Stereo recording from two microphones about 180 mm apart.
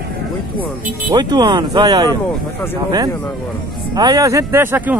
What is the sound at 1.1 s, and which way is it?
Speech, 25° right (ahead or behind).